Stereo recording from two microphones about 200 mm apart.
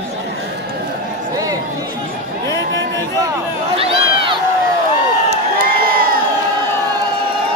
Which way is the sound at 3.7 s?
30° right (ahead or behind).